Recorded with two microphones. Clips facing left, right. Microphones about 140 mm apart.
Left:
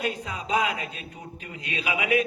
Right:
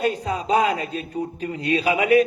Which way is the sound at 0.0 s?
35° right (ahead or behind).